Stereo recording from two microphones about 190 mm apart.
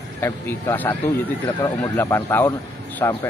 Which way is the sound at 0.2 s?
10° left (ahead or behind).